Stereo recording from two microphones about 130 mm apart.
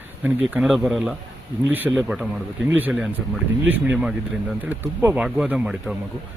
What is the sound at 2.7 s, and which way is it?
Speech, 15° right (ahead or behind).